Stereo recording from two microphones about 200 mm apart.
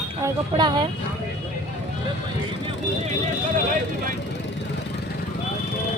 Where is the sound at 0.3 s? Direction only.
20° right (ahead or behind).